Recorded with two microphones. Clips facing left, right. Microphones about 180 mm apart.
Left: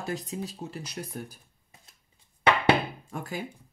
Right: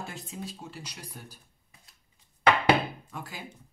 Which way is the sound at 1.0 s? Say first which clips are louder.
Left 9 dB; 50° left (ahead or behind).